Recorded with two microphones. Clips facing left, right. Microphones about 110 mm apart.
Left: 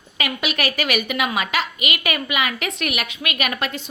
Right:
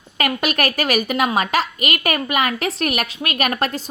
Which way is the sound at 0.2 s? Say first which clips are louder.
Right 4 dB; 45° right (ahead or behind).